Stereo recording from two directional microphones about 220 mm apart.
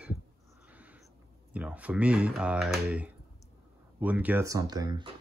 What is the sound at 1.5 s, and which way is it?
Speech, 5° right (ahead or behind).